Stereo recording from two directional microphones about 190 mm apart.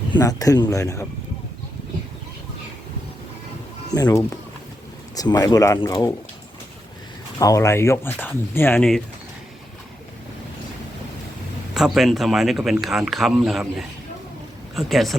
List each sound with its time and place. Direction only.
0.1 s speech: 20° left (ahead or behind)
3.9 s speech: 20° left (ahead or behind)
7.3 s speech: 15° left (ahead or behind)
11.7 s a man's voice: centre (ahead or behind)